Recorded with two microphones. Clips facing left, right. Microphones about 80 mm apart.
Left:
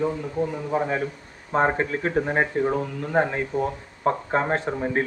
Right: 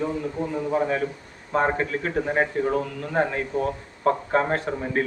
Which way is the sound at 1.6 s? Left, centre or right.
Left.